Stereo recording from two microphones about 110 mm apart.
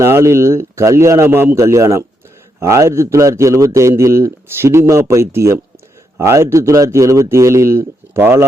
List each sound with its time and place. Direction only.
0.0 s a man's voice: 25° right (ahead or behind)